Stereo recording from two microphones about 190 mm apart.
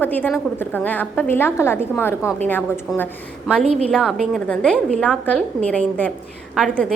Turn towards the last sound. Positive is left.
turn(degrees=0)  # may be behind; listen again after turning